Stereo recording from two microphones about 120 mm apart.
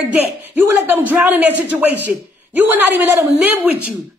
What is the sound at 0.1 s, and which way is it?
A woman's voice, 15° right (ahead or behind).